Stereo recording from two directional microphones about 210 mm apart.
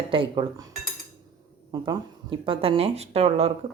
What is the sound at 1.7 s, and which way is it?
Speech, 20° right (ahead or behind).